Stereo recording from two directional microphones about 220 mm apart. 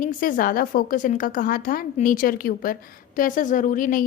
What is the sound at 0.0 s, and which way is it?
A woman's voice, 40° left (ahead or behind).